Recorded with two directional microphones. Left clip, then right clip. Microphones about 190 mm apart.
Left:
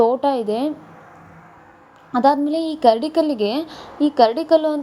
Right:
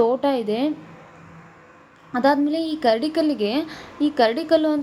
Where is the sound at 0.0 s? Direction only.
15° left (ahead or behind).